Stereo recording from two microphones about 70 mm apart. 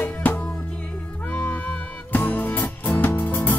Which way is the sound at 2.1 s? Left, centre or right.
Left.